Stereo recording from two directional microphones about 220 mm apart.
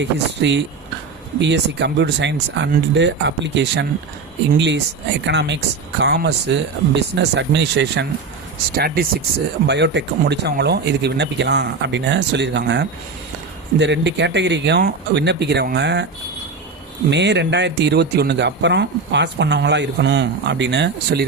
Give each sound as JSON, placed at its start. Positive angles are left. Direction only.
{"t": 0.0, "sound": "a man's voice", "side_deg": -55}
{"t": 8.7, "sound": "a man's voice", "side_deg": -40}
{"t": 17.1, "sound": "a man's voice", "side_deg": -50}